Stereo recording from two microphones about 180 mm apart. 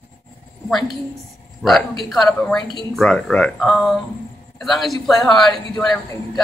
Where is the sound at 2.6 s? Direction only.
25° left (ahead or behind).